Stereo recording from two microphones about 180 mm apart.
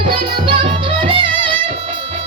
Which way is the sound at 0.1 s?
30° right (ahead or behind).